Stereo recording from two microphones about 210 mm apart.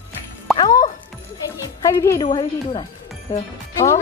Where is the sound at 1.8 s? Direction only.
15° left (ahead or behind).